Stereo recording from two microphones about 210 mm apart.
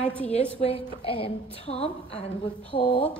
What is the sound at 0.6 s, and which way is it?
A woman's voice, 25° left (ahead or behind).